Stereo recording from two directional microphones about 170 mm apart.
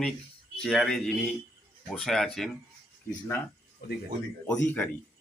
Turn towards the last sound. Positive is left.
turn(degrees=10)  # may be behind; listen again after turning